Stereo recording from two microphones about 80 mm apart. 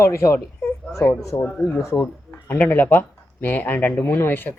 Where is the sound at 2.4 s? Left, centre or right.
Centre.